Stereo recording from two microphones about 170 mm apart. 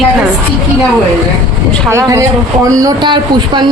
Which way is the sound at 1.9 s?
20° right (ahead or behind).